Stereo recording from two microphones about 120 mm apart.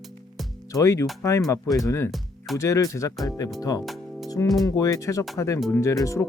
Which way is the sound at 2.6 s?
25° left (ahead or behind).